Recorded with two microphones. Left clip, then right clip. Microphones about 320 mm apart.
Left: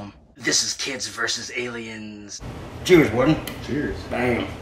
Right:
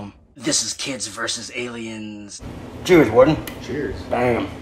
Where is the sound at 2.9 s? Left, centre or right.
Centre.